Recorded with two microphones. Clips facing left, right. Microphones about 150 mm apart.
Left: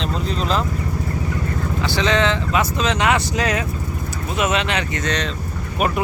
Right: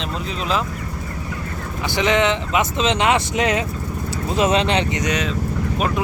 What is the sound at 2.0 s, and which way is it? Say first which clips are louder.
Speech: right 2 dB; 20° right (ahead or behind).